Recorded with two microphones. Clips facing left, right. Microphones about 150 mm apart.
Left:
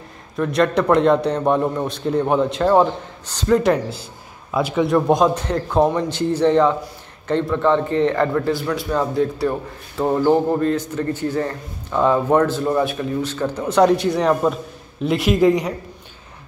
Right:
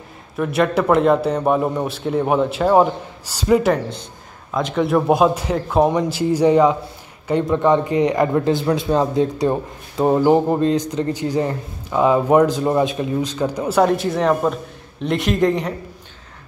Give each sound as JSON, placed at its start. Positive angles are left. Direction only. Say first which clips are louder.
{"t": 0.4, "sound": "a man's voice", "louder": "even", "side_deg": -5}
{"t": 4.5, "sound": "a man's voice", "louder": "left 1 dB", "side_deg": 5}